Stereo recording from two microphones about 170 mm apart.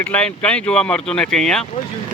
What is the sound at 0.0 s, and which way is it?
Speech, 5° left (ahead or behind).